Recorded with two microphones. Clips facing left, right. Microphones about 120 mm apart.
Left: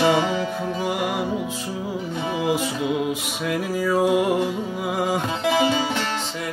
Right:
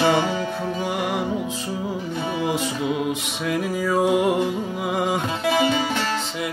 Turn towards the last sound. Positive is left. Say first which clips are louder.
# even
turn(degrees=25)  # may be behind; listen again after turning